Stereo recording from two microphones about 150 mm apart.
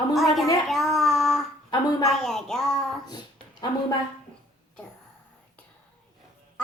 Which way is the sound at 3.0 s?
25° left (ahead or behind).